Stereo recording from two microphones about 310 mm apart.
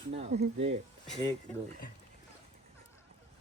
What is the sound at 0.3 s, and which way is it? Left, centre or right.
Speech, right.